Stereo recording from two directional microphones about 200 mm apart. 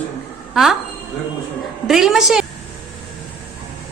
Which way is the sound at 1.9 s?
Centre (ahead or behind).